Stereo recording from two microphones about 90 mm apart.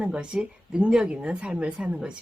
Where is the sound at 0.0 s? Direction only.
10° right (ahead or behind).